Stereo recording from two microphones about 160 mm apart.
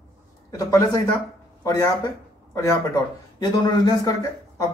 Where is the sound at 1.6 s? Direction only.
20° left (ahead or behind).